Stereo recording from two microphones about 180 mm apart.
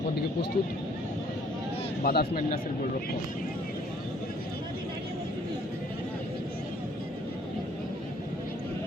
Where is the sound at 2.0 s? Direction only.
60° left (ahead or behind).